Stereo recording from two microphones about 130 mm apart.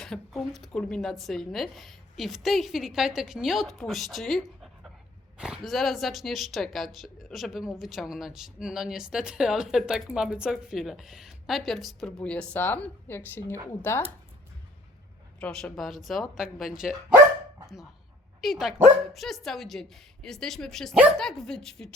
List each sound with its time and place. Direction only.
0.0 s speech: centre (ahead or behind)
15.4 s speech: 5° left (ahead or behind)
18.4 s speech: centre (ahead or behind)